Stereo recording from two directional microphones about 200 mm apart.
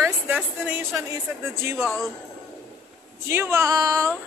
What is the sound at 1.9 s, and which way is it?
Speech, centre (ahead or behind).